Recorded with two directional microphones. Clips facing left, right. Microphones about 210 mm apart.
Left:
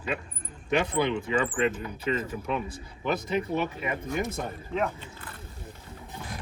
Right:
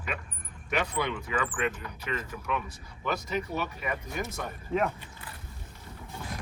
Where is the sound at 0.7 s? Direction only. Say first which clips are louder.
Left 5 dB; 30° left (ahead or behind).